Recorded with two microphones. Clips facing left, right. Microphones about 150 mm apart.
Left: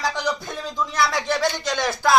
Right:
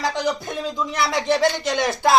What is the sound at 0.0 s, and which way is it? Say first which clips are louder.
Speech: right 2 dB; 20° right (ahead or behind).